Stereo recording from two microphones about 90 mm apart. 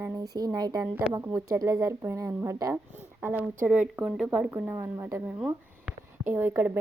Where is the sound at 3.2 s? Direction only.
20° right (ahead or behind).